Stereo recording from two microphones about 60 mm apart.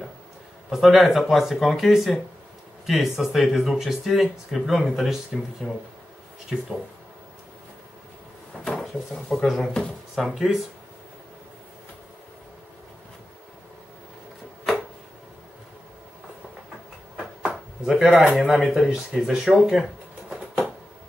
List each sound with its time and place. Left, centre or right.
0.7 s speech: centre
8.6 s speech: centre
17.4 s a sound: centre
18.1 s speech: right
18.5 s speech: centre
19.8 s a sound: centre